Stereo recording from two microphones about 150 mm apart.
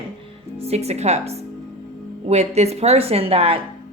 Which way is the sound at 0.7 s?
45° right (ahead or behind).